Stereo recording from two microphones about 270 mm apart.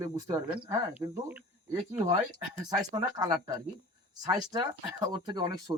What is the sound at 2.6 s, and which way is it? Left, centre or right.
Speech, centre.